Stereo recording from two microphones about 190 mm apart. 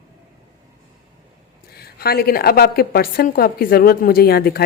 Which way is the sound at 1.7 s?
55° left (ahead or behind).